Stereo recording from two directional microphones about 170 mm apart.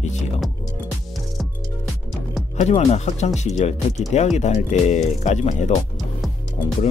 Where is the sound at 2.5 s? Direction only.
40° left (ahead or behind).